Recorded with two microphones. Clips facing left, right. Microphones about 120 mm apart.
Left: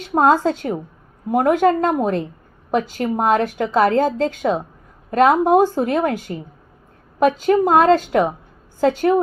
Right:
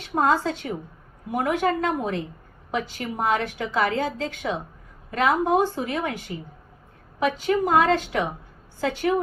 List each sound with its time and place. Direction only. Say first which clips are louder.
0.2 s a woman's voice: left 6 dB; 45° left (ahead or behind)